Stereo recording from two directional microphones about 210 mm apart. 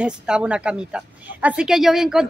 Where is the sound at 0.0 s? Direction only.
5° right (ahead or behind).